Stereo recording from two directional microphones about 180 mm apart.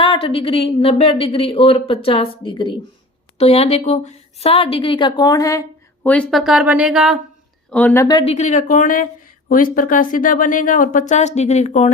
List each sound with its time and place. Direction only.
0.0 s a woman's voice: 30° left (ahead or behind); by 7.2 s centre (ahead or behind)
7.7 s speech: 10° left (ahead or behind)
8.2 s speech: 35° left (ahead or behind)